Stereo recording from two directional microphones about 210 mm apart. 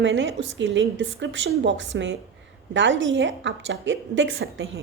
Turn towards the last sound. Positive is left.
turn(degrees=-65)  # may be behind; listen again after turning